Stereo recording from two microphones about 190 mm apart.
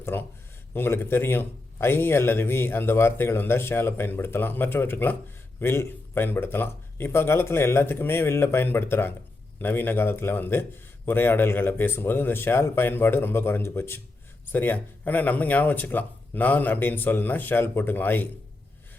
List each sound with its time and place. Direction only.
0.0 s a man's voice: 10° left (ahead or behind)